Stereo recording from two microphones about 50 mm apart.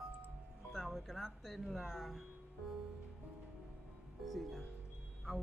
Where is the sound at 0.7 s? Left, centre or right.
Centre.